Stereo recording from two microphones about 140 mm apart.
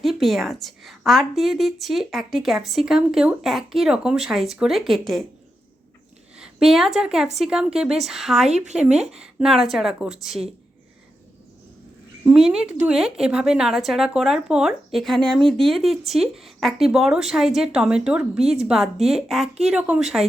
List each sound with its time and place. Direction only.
0.0 s a woman's voice: centre (ahead or behind)
6.3 s a woman's voice: 5° right (ahead or behind)
8.4 s speech: 55° right (ahead or behind)
9.0 s a woman's voice: 5° right (ahead or behind)
12.3 s a woman's voice: 5° right (ahead or behind)